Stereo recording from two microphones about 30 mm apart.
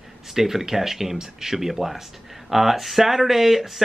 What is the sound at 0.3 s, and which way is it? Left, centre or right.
Speech, centre.